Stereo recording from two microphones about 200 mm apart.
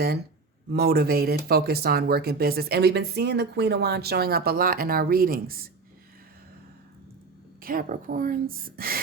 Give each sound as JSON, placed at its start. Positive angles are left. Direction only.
{"t": 0.7, "sound": "speech", "side_deg": -50}
{"t": 7.6, "sound": "speech", "side_deg": -45}